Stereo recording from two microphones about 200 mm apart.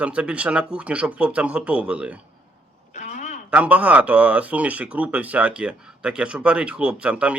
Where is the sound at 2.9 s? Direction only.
35° left (ahead or behind).